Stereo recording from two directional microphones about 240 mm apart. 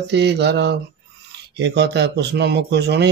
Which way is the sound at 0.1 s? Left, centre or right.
Right.